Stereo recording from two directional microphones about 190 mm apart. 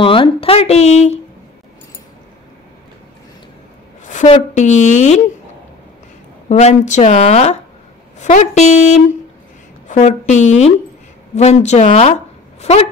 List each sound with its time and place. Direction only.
0.0 s speech: 30° left (ahead or behind)
4.4 s speech: 40° left (ahead or behind)
6.5 s speech: 35° left (ahead or behind)